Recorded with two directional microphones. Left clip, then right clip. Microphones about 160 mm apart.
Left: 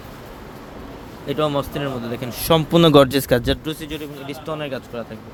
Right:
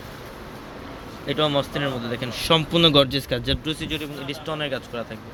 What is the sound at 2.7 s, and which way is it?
Speech, 55° left (ahead or behind).